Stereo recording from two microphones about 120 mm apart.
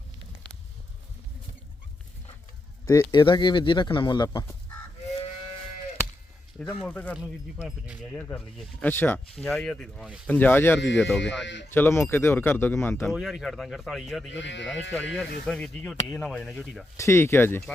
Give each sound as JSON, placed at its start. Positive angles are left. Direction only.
{"t": 2.8, "sound": "speech", "side_deg": 25}
{"t": 3.1, "sound": "speech", "side_deg": 40}
{"t": 6.8, "sound": "speech", "side_deg": 10}
{"t": 9.3, "sound": "speech", "side_deg": 5}
{"t": 10.2, "sound": "speech", "side_deg": 15}
{"t": 11.0, "sound": "speech", "side_deg": 5}
{"t": 11.7, "sound": "speech", "side_deg": 20}
{"t": 13.1, "sound": "speech", "side_deg": 0}
{"t": 17.0, "sound": "speech", "side_deg": 25}